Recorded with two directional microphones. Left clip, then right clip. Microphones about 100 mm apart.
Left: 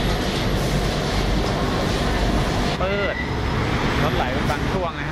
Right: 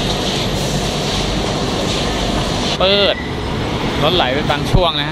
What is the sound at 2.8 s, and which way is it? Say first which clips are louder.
Vehicle: right 13 dB; 35° right (ahead or behind).